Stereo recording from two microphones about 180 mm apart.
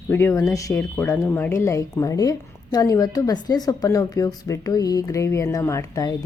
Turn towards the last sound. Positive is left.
turn(degrees=15)  # may be behind; listen again after turning